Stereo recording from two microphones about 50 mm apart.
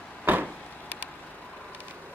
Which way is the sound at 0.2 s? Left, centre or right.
Right.